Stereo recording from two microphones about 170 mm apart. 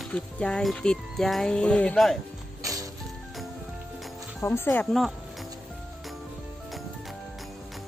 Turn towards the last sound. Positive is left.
turn(degrees=0)  # may be behind; listen again after turning